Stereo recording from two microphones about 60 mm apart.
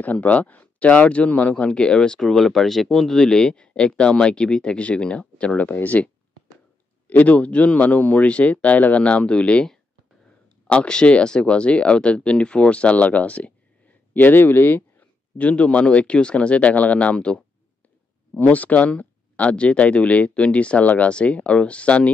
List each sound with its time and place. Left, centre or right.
0.0 s speech: left
7.1 s speech: left
14.1 s speech: left